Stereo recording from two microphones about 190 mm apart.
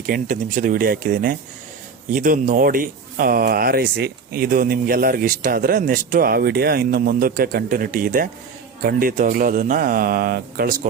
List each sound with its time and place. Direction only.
0.0 s speech: 45° right (ahead or behind)